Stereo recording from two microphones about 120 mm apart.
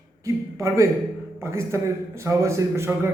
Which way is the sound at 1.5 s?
20° right (ahead or behind).